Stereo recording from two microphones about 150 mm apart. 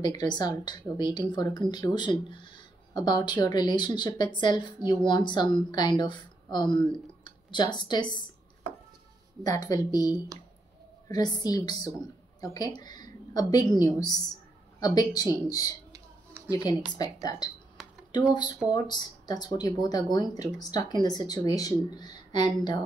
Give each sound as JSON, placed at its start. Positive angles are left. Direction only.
{"t": 0.0, "sound": "a woman's voice", "side_deg": 30}
{"t": 9.4, "sound": "a woman's voice", "side_deg": 25}
{"t": 14.8, "sound": "a woman's voice", "side_deg": 25}
{"t": 16.5, "sound": "a woman's voice", "side_deg": 25}